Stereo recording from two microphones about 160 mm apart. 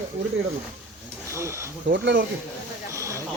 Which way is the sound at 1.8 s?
90° right.